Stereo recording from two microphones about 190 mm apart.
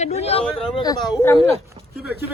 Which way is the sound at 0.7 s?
20° left (ahead or behind).